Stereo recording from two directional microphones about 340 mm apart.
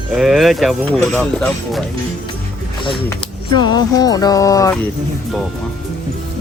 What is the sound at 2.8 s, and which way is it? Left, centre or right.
Speech, centre.